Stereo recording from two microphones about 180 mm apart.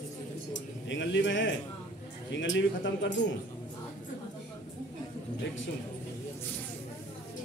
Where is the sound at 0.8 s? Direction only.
90° left.